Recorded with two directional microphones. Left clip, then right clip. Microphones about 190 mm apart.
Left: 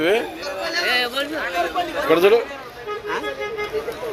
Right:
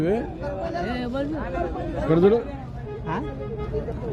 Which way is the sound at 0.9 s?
25° right (ahead or behind).